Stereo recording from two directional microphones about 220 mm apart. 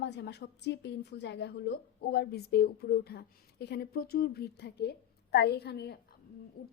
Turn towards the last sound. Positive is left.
turn(degrees=50)  # may be behind; listen again after turning